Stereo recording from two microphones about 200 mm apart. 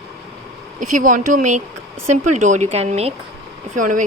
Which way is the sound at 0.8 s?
40° right (ahead or behind).